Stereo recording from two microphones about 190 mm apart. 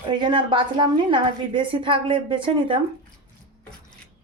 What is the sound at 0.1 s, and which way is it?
A woman's voice, 25° right (ahead or behind).